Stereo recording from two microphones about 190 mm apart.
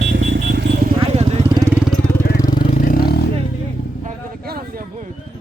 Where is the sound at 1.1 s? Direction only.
35° right (ahead or behind).